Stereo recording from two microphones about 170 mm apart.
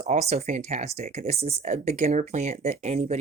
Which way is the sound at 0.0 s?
40° right (ahead or behind).